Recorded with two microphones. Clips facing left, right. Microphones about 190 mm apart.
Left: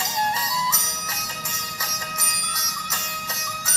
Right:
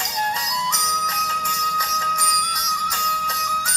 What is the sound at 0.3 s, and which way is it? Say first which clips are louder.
Music: even; 5° left (ahead or behind).